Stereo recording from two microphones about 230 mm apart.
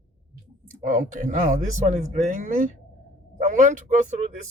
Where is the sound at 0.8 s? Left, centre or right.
Right.